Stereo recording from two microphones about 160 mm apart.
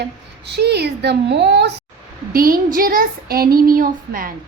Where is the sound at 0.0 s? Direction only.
90° right.